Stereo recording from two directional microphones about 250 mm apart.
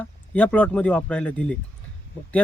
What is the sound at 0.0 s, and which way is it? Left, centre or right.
A man's voice, centre.